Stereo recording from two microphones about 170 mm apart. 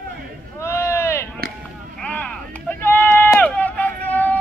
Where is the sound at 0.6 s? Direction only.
15° left (ahead or behind).